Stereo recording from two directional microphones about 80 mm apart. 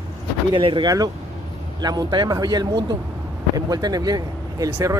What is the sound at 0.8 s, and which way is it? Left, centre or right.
Speech, right.